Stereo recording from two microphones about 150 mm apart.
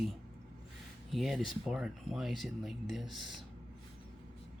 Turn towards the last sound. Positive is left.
turn(degrees=0)  # may be behind; listen again after turning